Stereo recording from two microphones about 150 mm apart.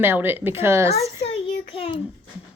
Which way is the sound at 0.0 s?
15° right (ahead or behind).